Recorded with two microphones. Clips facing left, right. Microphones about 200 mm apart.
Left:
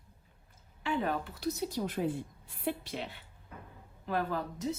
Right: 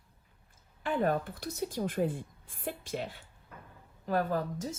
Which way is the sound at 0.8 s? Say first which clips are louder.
Right 3 dB; 50° right (ahead or behind).